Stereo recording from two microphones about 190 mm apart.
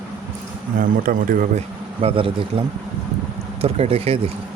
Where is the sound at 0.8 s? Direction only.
50° right (ahead or behind).